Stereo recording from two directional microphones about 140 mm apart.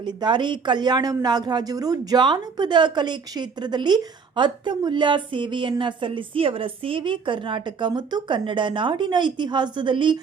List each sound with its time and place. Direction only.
0.0 s speech: 30° right (ahead or behind)